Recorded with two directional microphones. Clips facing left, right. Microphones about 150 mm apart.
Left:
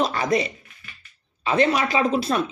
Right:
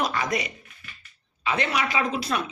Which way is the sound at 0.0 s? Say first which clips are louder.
Left 5 dB; 30° left (ahead or behind).